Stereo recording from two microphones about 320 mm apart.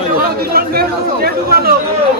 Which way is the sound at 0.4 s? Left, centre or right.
Right.